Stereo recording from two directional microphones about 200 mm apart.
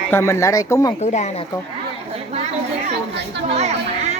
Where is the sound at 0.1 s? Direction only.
10° left (ahead or behind).